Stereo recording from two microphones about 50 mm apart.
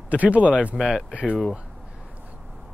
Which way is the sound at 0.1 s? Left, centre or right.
Right.